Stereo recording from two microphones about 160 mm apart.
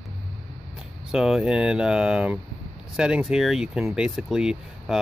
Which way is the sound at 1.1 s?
5° right (ahead or behind).